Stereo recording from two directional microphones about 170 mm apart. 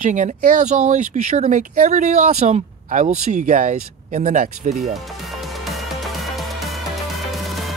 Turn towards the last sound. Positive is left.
turn(degrees=0)  # may be behind; listen again after turning